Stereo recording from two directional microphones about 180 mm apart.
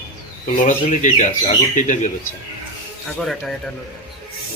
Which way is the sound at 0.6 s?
45° left (ahead or behind).